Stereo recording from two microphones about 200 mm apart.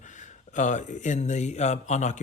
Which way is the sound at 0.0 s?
40° left (ahead or behind).